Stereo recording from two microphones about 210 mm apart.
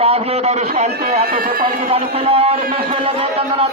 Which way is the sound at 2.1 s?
30° right (ahead or behind).